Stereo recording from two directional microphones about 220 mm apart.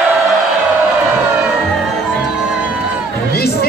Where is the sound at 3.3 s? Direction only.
45° left (ahead or behind).